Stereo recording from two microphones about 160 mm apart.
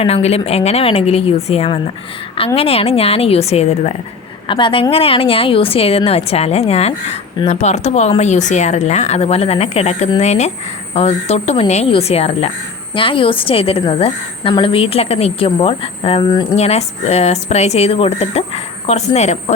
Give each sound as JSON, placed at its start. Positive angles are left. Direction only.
{"t": 0.0, "sound": "speech", "side_deg": 40}
{"t": 4.4, "sound": "speech", "side_deg": 30}
{"t": 16.6, "sound": "speech", "side_deg": 40}